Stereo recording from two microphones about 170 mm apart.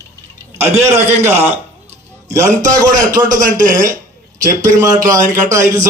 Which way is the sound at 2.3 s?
20° right (ahead or behind).